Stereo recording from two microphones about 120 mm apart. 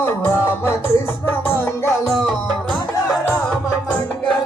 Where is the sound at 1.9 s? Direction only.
Centre (ahead or behind).